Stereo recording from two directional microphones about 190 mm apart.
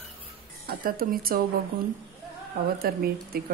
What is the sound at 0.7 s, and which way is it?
Speech, 50° right (ahead or behind).